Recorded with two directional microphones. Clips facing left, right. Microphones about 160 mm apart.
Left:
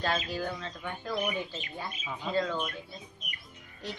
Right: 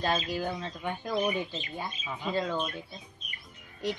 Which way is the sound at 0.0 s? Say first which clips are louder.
Right 2 dB; 15° right (ahead or behind).